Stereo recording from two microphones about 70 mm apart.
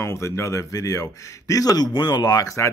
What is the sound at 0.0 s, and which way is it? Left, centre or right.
Speech, left.